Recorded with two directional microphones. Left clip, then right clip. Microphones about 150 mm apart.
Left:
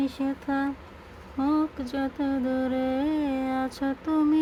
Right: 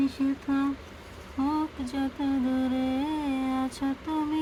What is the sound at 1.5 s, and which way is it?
Music, 40° left (ahead or behind).